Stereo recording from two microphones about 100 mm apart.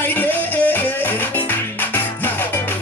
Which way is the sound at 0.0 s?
20° left (ahead or behind).